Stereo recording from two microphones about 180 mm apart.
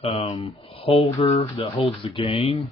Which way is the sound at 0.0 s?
30° left (ahead or behind).